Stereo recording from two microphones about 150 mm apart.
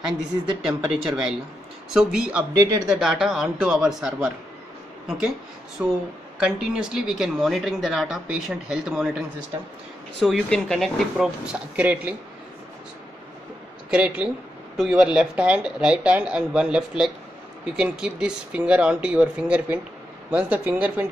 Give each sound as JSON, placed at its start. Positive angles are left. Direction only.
{"t": 0.6, "sound": "speech", "side_deg": 0}
{"t": 2.5, "sound": "speech", "side_deg": -25}
{"t": 2.9, "sound": "a woman's voice", "side_deg": -5}
{"t": 5.8, "sound": "speech", "side_deg": -10}
{"t": 10.1, "sound": "speech", "side_deg": 5}
{"t": 13.8, "sound": "speech", "side_deg": -5}